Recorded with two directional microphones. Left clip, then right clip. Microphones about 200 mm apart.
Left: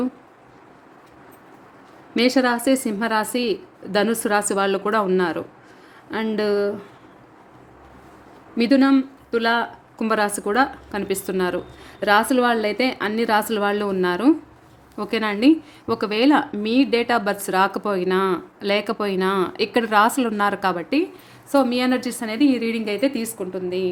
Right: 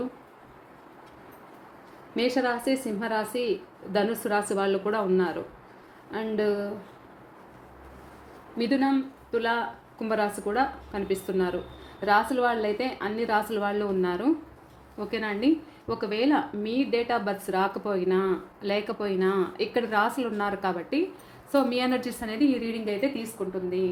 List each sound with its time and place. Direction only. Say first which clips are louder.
2.1 s a woman's voice: left 7 dB; 45° left (ahead or behind)
8.5 s a woman's voice: left 8 dB; 50° left (ahead or behind)
21.5 s a woman's voice: left 6 dB; 30° left (ahead or behind); by 23.9 s 45° left (ahead or behind)